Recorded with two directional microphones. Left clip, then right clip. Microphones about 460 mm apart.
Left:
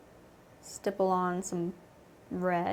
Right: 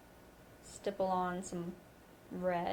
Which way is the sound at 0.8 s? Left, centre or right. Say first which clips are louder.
Left 6 dB; left.